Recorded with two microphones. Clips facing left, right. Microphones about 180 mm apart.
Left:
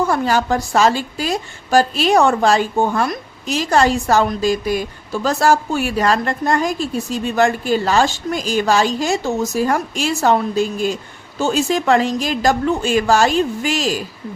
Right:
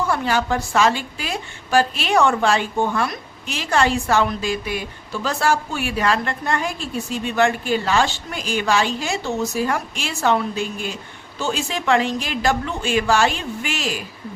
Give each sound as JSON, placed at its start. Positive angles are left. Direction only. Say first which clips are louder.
{"t": 0.0, "sound": "a woman's voice", "louder": "left 4 dB", "side_deg": 40}